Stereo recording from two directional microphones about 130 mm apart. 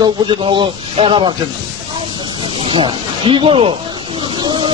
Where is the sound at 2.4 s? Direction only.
40° right (ahead or behind).